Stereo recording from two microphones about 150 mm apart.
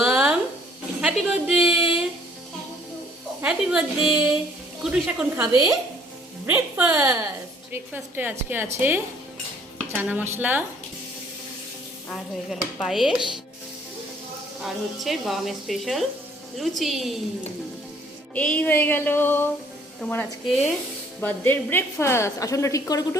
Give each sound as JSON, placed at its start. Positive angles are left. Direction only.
{"t": 0.0, "sound": "a sound", "side_deg": -5}
{"t": 1.0, "sound": "speech", "side_deg": -5}
{"t": 3.4, "sound": "a woman's voice", "side_deg": -5}
{"t": 5.4, "sound": "a woman's voice", "side_deg": -20}
{"t": 12.1, "sound": "speech", "side_deg": 0}
{"t": 14.6, "sound": "speech", "side_deg": 0}
{"t": 18.3, "sound": "a sound", "side_deg": 10}
{"t": 20.5, "sound": "speech", "side_deg": 0}
{"t": 21.2, "sound": "a woman's voice", "side_deg": 10}